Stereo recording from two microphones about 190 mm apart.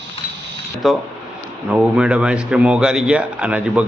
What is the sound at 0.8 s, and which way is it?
A man's voice, centre (ahead or behind).